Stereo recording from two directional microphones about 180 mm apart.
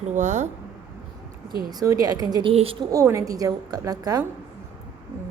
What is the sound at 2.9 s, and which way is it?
A woman's voice, 15° right (ahead or behind).